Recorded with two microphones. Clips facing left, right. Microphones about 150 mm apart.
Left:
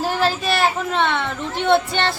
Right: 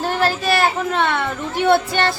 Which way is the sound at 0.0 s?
Centre (ahead or behind).